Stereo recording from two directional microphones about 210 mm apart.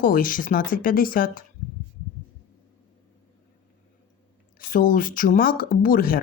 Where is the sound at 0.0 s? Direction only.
40° left (ahead or behind).